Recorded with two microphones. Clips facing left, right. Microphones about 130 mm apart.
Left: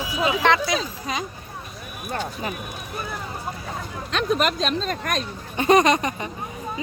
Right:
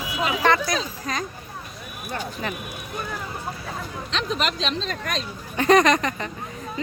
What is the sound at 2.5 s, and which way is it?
Speech, 5° left (ahead or behind).